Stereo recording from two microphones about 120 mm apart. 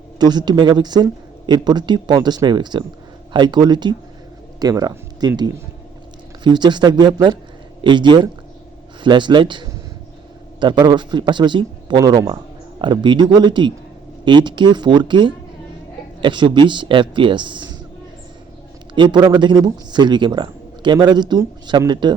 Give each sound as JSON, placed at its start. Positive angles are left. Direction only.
{"t": 0.2, "sound": "speech", "side_deg": -35}
{"t": 6.4, "sound": "speech", "side_deg": -40}
{"t": 18.9, "sound": "speech", "side_deg": -40}